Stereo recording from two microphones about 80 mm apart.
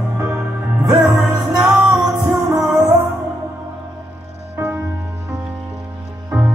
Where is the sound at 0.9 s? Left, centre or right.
Centre.